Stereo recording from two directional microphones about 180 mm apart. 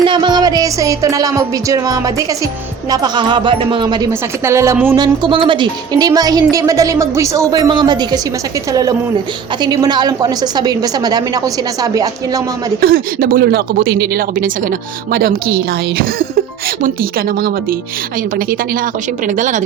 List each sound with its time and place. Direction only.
0.0 s speech: 25° right (ahead or behind)
4.9 s speech: 25° right (ahead or behind)
12.8 s a woman's voice: 55° right (ahead or behind)